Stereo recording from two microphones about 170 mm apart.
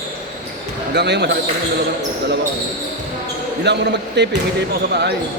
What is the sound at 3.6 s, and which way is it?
Speech, 90° right.